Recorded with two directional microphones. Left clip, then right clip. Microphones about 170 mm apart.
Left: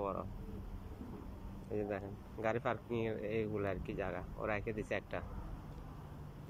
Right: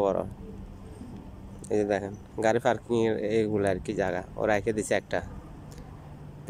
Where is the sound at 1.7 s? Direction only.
35° right (ahead or behind).